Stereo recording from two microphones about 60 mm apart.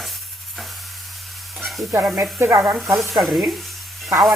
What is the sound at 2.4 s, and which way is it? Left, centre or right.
Speech, right.